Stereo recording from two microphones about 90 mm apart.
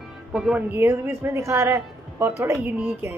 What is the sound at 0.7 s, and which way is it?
A woman's voice, 25° right (ahead or behind).